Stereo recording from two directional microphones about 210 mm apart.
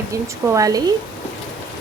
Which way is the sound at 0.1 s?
15° right (ahead or behind).